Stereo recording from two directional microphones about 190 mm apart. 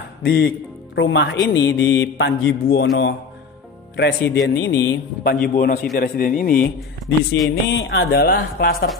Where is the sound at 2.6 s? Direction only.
60° left (ahead or behind).